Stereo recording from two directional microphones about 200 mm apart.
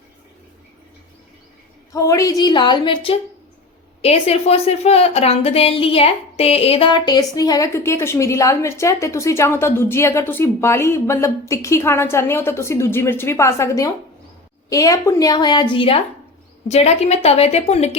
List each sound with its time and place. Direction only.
1.9 s a woman's voice: 15° left (ahead or behind); by 17.9 s 30° left (ahead or behind)